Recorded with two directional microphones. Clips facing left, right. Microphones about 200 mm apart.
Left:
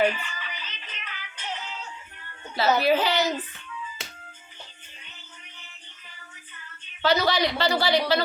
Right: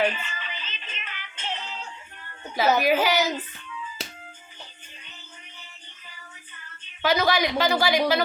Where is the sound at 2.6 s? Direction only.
15° right (ahead or behind).